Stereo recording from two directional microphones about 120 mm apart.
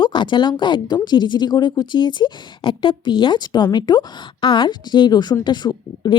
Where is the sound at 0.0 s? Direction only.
40° left (ahead or behind).